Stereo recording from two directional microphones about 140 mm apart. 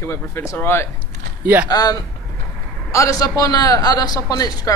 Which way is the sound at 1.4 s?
10° right (ahead or behind).